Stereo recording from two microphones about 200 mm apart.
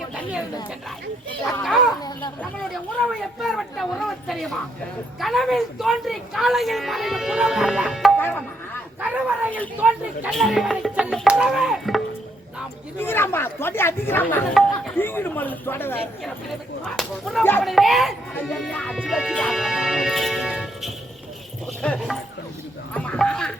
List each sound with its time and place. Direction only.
1.6 s a sound: centre (ahead or behind)
2.0 s speech: 20° left (ahead or behind)
3.1 s a woman's voice: centre (ahead or behind)
13.0 s a woman's voice: 10° left (ahead or behind)